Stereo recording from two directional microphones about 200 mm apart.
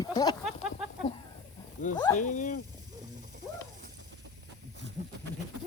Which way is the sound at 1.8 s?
40° left (ahead or behind).